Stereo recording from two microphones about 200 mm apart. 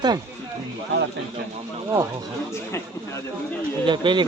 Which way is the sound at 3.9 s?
25° right (ahead or behind).